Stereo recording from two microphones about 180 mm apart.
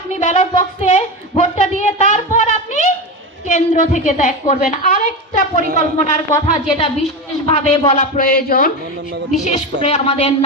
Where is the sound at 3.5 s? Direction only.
45° left (ahead or behind).